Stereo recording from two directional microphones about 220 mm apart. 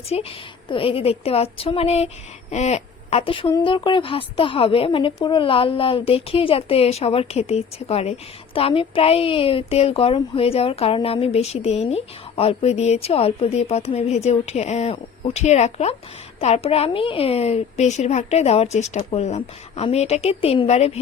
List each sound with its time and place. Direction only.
0.1 s a woman's voice: 25° left (ahead or behind)